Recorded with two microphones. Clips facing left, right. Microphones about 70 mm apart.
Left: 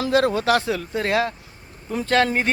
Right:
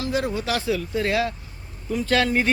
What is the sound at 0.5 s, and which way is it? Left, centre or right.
Speech, left.